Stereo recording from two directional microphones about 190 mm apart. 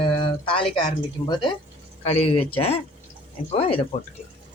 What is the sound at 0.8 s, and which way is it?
Speech, 20° left (ahead or behind).